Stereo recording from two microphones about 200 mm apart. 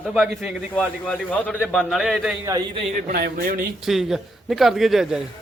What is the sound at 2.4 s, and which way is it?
Speech, 20° right (ahead or behind).